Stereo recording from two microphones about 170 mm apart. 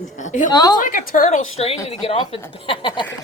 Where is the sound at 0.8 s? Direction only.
50° left (ahead or behind); by 3.1 s 30° left (ahead or behind).